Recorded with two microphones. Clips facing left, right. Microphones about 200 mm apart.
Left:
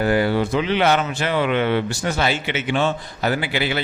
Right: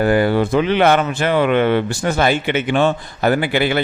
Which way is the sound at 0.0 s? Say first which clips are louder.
Right 4 dB; 50° right (ahead or behind).